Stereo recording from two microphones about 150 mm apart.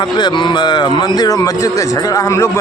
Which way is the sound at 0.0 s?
30° left (ahead or behind).